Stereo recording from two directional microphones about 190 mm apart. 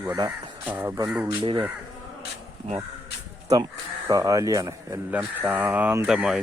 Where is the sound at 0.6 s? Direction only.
10° right (ahead or behind).